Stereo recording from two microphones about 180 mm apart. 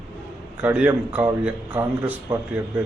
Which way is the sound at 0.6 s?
10° right (ahead or behind).